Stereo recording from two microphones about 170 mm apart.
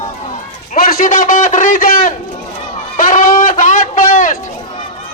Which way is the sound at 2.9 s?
50° left (ahead or behind).